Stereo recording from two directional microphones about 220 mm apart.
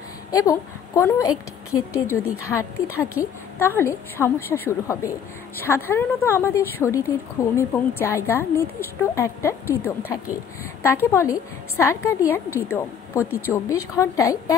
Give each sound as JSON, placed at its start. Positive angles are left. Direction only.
{"t": 0.3, "sound": "a woman's voice", "side_deg": 15}
{"t": 2.2, "sound": "a woman's voice", "side_deg": 75}
{"t": 2.5, "sound": "a woman's voice", "side_deg": 10}